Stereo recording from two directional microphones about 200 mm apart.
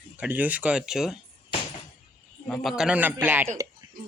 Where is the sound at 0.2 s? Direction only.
10° right (ahead or behind).